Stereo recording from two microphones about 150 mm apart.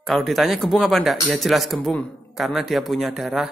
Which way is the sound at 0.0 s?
Centre (ahead or behind).